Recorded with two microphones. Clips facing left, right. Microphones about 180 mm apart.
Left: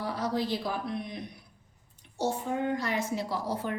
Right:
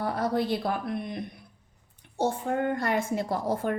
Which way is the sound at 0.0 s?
55° right (ahead or behind).